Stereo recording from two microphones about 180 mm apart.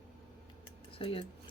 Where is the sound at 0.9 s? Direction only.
30° left (ahead or behind).